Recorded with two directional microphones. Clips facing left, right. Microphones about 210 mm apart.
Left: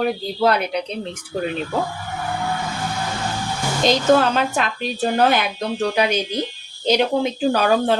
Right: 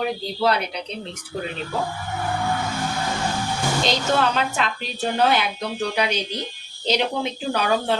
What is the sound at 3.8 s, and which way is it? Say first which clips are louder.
A woman's voice: left 8 dB; 45° left (ahead or behind).